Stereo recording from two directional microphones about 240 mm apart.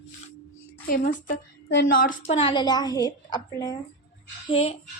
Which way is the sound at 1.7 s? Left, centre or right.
Left.